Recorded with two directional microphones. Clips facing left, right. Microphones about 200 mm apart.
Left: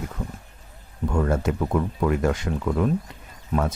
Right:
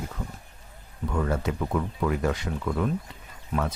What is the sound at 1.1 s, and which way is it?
Speech, 45° left (ahead or behind).